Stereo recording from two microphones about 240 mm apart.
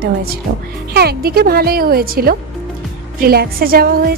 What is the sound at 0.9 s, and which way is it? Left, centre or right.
A woman's voice, right.